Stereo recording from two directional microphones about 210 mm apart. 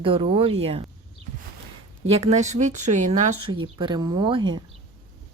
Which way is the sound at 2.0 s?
30° right (ahead or behind).